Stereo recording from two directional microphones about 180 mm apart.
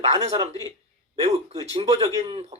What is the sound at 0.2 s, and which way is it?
Speech, 35° right (ahead or behind).